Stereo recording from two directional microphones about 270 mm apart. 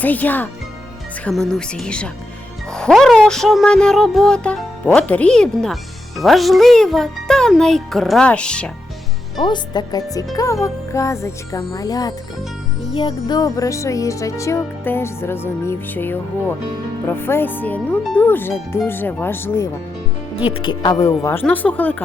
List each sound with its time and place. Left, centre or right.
0.0 s speech: centre
9.4 s speech: centre